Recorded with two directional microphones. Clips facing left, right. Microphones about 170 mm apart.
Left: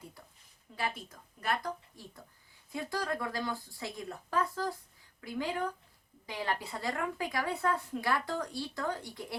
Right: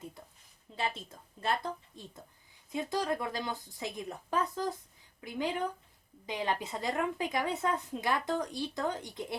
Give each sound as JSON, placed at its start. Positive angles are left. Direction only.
{"t": 0.8, "sound": "a woman's voice", "side_deg": -25}